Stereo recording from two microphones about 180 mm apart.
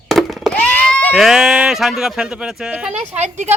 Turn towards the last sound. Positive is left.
turn(degrees=-40)  # may be behind; listen again after turning